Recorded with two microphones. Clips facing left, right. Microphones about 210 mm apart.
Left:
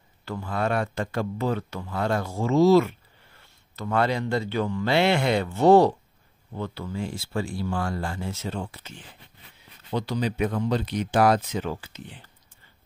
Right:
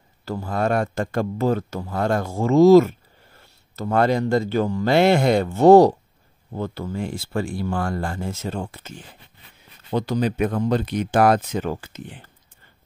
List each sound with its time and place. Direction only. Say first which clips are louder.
0.2 s speech: right 4 dB; 40° right (ahead or behind)